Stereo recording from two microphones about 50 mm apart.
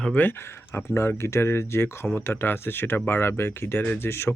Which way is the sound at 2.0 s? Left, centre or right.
Left.